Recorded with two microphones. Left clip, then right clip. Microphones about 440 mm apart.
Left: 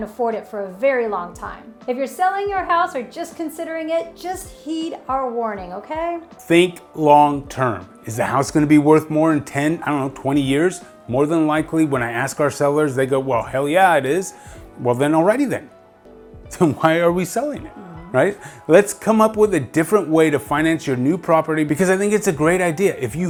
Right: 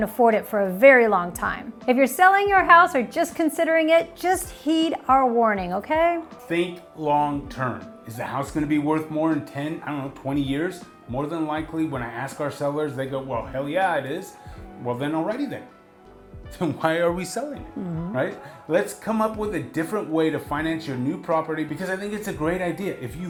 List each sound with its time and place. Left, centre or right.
0.0 s a woman's voice: centre
6.5 s speech: left
8.2 s speech: left
16.6 s speech: left
18.7 s speech: left